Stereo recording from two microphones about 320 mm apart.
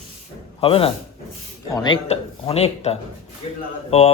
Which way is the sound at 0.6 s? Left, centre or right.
Centre.